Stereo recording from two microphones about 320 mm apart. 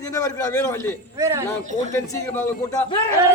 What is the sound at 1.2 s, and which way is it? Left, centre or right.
Speech, centre.